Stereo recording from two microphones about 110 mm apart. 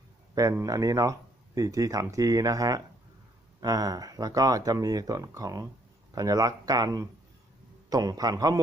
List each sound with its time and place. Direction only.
0.6 s speech: 30° right (ahead or behind)